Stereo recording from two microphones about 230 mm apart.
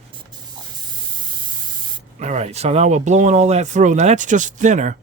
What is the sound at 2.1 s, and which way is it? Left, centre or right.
Speech, right.